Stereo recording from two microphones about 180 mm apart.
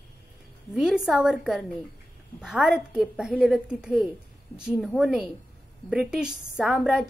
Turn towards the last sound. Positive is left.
turn(degrees=0)  # may be behind; listen again after turning